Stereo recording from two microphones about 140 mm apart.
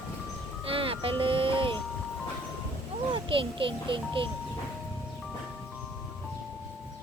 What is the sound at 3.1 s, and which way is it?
A child's voice, 40° right (ahead or behind).